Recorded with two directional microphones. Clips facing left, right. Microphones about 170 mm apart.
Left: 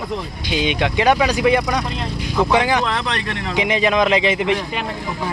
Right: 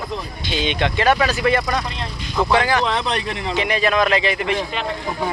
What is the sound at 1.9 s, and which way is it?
Speech, 5° left (ahead or behind).